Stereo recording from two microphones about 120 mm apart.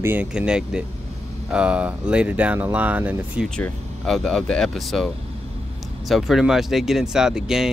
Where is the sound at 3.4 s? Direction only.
5° left (ahead or behind).